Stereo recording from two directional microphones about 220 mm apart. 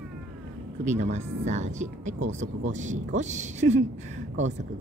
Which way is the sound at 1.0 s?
30° right (ahead or behind).